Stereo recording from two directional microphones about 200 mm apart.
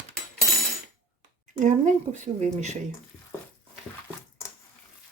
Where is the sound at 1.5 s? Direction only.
35° right (ahead or behind).